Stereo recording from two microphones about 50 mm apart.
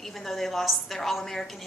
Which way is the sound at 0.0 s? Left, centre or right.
Centre.